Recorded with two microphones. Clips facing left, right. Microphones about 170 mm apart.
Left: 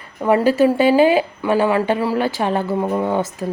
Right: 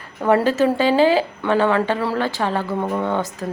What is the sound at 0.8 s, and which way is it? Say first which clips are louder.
A woman's voice: left 2 dB; 15° left (ahead or behind).